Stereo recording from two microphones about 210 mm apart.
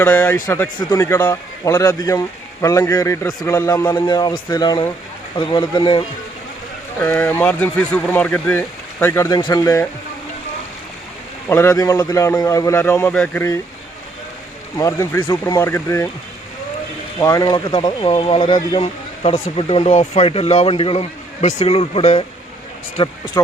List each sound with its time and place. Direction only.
0.0 s speech: 5° left (ahead or behind); by 6.1 s 25° left (ahead or behind)
7.0 s speech: 10° left (ahead or behind)
11.4 s speech: 10° left (ahead or behind)
14.8 s speech: 15° left (ahead or behind)
17.2 s speech: 15° left (ahead or behind)